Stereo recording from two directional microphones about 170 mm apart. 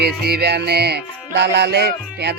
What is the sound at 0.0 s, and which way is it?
Music, 75° right (ahead or behind).